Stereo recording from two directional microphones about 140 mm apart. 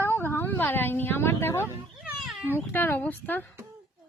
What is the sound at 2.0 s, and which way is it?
Cat, centre (ahead or behind).